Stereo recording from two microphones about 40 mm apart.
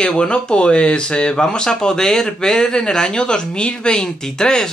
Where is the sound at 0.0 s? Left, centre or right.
Left.